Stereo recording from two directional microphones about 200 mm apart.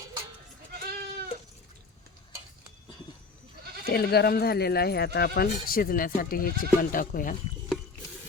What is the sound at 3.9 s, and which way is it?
Speech, 50° left (ahead or behind).